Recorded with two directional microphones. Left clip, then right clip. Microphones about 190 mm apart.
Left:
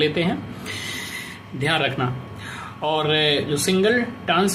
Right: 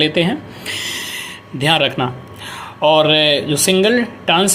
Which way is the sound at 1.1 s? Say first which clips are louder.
Right 5 dB; 25° right (ahead or behind).